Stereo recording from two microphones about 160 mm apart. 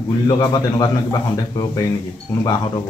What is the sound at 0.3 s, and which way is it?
A man's voice, 25° left (ahead or behind).